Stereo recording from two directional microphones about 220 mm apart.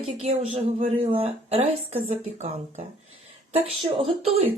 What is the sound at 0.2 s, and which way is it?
Speech, 30° right (ahead or behind).